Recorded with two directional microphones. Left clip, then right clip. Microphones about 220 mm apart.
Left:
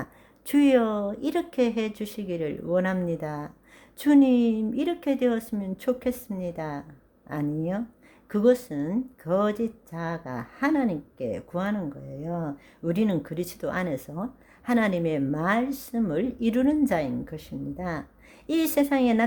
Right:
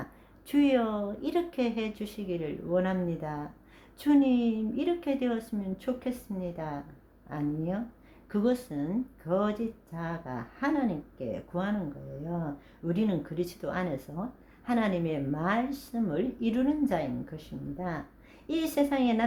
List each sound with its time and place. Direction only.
0.0 s speech: 35° left (ahead or behind)
12.8 s speech: 40° left (ahead or behind)